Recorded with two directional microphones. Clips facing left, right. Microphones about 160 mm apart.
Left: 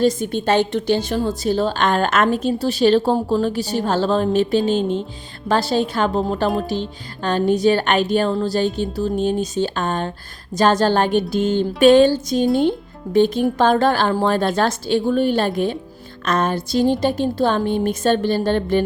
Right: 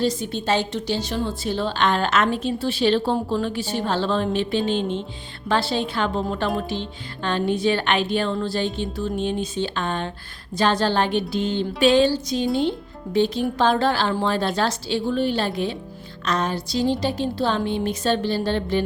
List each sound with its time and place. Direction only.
0.0 s a woman's voice: 50° left (ahead or behind)